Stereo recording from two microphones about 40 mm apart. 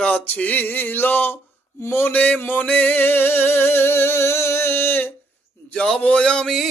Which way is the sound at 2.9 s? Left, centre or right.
Left.